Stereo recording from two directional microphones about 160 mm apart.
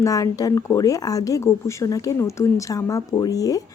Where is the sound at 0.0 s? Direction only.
20° left (ahead or behind).